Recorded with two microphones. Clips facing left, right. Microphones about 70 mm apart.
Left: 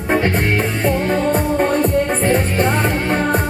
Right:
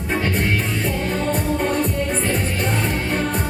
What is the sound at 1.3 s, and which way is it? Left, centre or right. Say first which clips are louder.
Music: left 4 dB; left.